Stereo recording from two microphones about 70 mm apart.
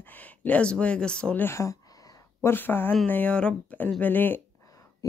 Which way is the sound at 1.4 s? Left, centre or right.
Left.